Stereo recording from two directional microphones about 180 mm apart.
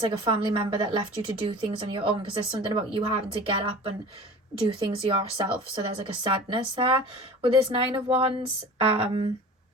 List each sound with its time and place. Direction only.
0.0 s a woman's voice: 30° right (ahead or behind)